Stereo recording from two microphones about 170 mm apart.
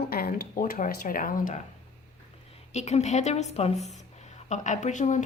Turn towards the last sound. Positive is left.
turn(degrees=45)  # may be behind; listen again after turning